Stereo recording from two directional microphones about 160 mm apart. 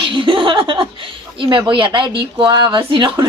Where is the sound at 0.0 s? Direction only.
30° right (ahead or behind).